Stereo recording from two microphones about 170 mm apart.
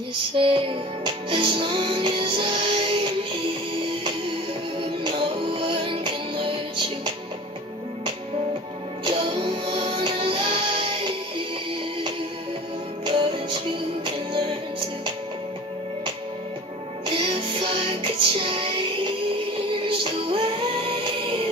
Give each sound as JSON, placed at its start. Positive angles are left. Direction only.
{"t": 0.4, "sound": "music", "side_deg": -30}
{"t": 5.0, "sound": "music", "side_deg": -30}
{"t": 9.0, "sound": "music", "side_deg": -30}
{"t": 13.0, "sound": "music", "side_deg": -30}
{"t": 17.0, "sound": "music", "side_deg": -30}